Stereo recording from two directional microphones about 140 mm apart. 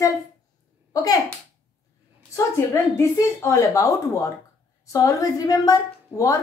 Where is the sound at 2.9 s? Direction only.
20° left (ahead or behind).